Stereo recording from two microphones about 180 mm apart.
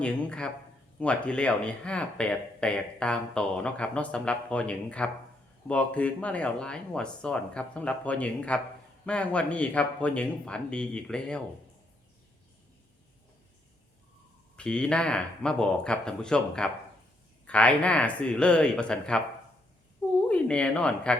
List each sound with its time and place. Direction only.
0.0 s speech: 5° left (ahead or behind)
14.5 s speech: 5° left (ahead or behind)
20.2 s speech: 5° left (ahead or behind)